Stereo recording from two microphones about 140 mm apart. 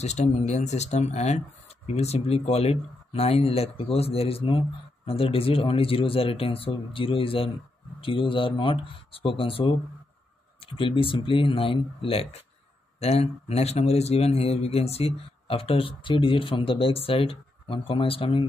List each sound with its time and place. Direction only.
0.0 s speech: 55° left (ahead or behind)